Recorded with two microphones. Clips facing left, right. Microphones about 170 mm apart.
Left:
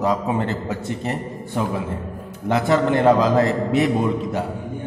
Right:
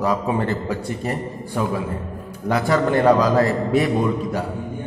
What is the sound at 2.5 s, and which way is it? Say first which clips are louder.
A man's voice: left 1 dB; 20° left (ahead or behind).